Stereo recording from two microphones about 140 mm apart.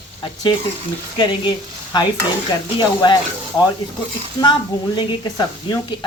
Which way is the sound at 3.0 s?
30° left (ahead or behind).